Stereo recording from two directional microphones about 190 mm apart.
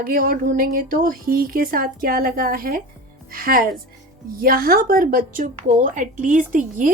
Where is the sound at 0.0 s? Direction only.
50° right (ahead or behind).